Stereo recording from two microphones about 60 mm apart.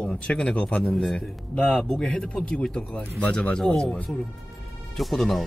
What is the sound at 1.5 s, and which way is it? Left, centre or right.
Speech, left.